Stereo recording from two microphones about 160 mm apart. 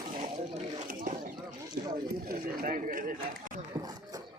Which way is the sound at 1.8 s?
75° right (ahead or behind).